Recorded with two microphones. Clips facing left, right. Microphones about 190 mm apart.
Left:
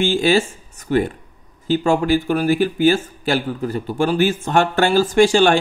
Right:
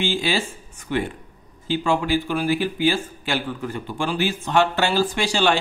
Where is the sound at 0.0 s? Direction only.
50° left (ahead or behind).